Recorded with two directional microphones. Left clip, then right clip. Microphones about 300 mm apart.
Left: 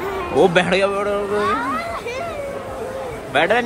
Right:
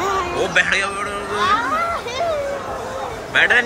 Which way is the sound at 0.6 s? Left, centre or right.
Centre.